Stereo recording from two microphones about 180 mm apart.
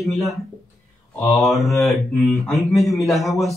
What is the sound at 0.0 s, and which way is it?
Speech, centre (ahead or behind).